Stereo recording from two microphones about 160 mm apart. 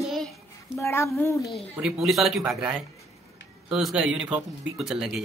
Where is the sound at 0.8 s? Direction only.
15° left (ahead or behind).